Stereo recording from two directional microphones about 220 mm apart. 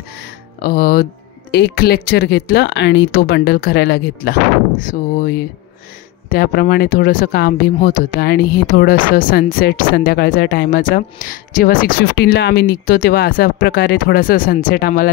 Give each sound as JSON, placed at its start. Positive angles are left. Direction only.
{"t": 0.6, "sound": "speech", "side_deg": 40}
{"t": 6.2, "sound": "speech", "side_deg": 45}